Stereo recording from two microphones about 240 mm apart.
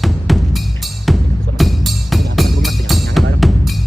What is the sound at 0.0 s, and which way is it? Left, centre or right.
Music, centre.